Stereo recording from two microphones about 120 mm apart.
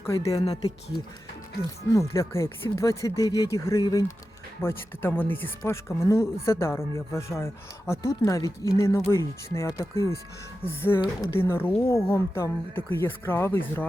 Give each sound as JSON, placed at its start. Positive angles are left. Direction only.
{"t": 0.0, "sound": "speech", "side_deg": 25}
{"t": 1.9, "sound": "speech", "side_deg": 25}
{"t": 4.6, "sound": "speech", "side_deg": 20}